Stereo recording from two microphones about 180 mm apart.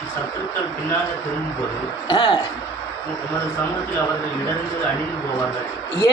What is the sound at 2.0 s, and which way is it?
Speech, 25° left (ahead or behind).